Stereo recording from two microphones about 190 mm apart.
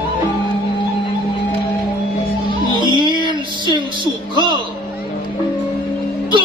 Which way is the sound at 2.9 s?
25° right (ahead or behind).